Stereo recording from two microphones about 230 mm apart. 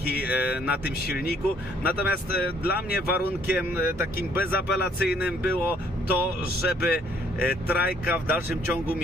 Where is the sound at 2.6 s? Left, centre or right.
Left.